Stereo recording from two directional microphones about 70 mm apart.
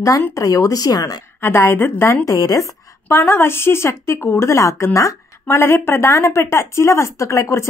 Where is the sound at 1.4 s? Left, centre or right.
Left.